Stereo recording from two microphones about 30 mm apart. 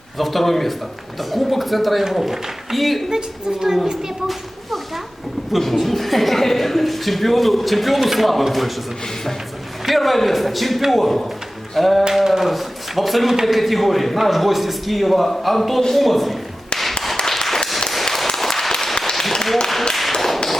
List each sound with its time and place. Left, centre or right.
0.2 s a woman's voice: centre
3.1 s a woman's voice: centre
5.5 s a woman's voice: centre
9.8 s a woman's voice: centre
12.2 s a woman's voice: centre
17.2 s a sound: centre
18.0 s applause: centre
18.3 s a sound: centre
20.1 s whip: centre